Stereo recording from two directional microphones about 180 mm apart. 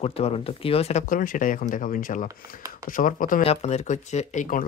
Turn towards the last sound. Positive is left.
turn(degrees=45)  # may be behind; listen again after turning